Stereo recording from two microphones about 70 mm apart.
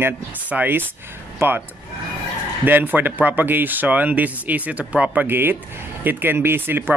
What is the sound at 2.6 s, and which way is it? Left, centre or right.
Speech, right.